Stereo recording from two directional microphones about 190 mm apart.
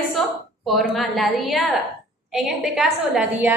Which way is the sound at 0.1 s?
Centre (ahead or behind).